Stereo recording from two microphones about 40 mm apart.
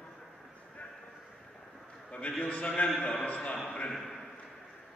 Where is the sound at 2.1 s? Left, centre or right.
Left.